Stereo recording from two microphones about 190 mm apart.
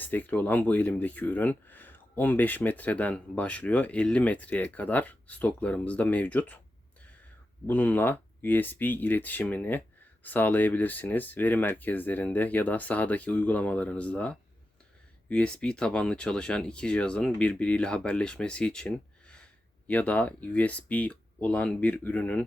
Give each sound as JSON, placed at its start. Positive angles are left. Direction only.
{"t": 0.0, "sound": "speech", "side_deg": 10}
{"t": 7.7, "sound": "speech", "side_deg": 10}